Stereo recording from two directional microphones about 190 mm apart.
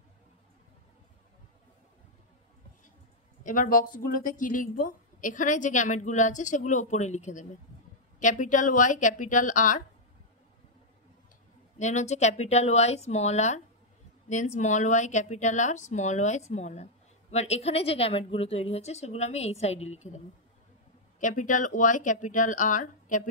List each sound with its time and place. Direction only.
3.4 s speech: 45° left (ahead or behind)
11.8 s speech: 35° left (ahead or behind)
21.2 s speech: 40° left (ahead or behind)